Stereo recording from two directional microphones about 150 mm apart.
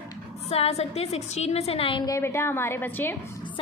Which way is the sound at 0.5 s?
45° left (ahead or behind).